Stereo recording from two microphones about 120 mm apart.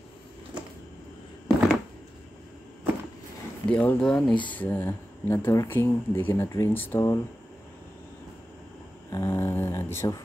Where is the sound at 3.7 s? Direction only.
15° left (ahead or behind).